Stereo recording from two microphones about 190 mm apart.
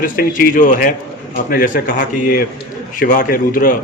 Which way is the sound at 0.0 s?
45° left (ahead or behind).